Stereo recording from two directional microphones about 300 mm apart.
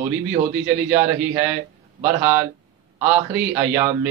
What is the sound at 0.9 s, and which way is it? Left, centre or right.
A man's voice, centre.